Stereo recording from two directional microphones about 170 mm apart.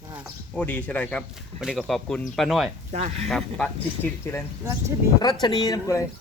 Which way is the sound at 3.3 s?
5° left (ahead or behind).